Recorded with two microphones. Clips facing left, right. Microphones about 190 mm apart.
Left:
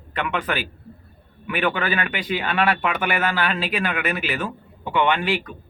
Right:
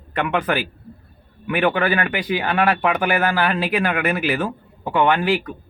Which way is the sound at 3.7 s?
55° right (ahead or behind).